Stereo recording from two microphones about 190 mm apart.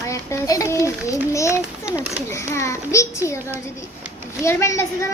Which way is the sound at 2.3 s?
15° left (ahead or behind).